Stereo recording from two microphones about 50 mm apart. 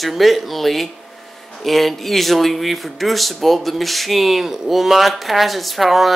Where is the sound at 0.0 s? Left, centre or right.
Centre.